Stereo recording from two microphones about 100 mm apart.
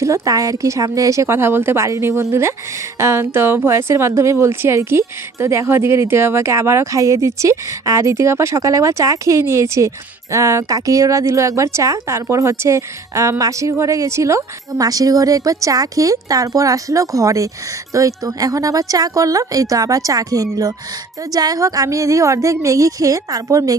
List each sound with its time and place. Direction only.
0.0 s a woman's voice: 35° right (ahead or behind)